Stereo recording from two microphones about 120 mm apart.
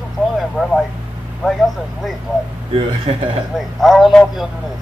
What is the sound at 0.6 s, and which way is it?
Speech, 5° left (ahead or behind).